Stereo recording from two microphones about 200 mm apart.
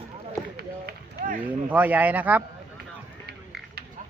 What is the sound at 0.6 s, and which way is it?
Run, 50° right (ahead or behind).